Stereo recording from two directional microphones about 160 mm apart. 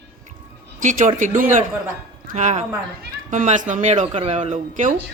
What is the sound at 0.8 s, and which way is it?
A woman's voice, 50° right (ahead or behind).